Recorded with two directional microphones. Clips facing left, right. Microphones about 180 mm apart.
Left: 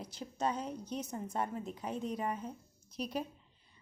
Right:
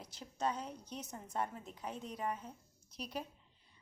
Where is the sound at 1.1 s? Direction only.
20° left (ahead or behind).